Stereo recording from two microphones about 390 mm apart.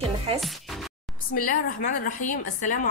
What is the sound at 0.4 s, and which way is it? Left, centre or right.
Music, centre.